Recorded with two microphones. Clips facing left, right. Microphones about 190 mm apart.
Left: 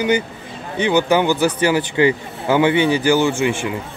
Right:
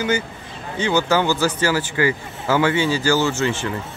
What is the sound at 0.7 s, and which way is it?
Speech, 15° left (ahead or behind).